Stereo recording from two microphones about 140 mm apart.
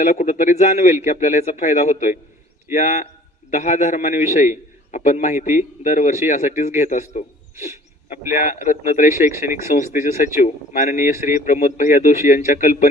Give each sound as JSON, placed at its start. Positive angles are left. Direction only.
{"t": 0.0, "sound": "a man's voice", "side_deg": 60}
{"t": 8.4, "sound": "a man's voice", "side_deg": 55}